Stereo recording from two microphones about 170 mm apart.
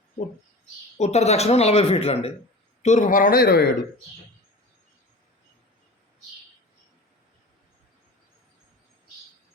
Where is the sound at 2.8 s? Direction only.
45° left (ahead or behind); by 3.7 s 65° left (ahead or behind).